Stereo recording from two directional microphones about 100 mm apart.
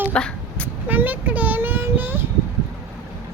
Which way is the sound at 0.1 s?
10° left (ahead or behind).